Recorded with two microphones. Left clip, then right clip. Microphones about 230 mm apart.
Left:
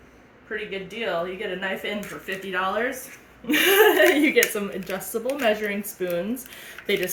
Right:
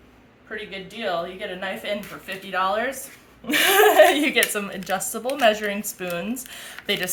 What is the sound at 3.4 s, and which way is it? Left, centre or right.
A woman's voice, right.